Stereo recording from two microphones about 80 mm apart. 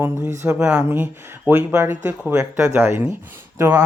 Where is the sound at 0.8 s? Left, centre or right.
Right.